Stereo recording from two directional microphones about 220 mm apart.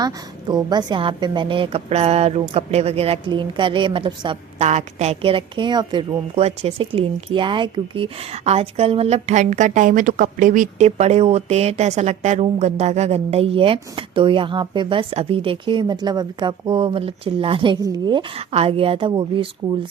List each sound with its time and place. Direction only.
0.0 s a woman's voice: 20° right (ahead or behind)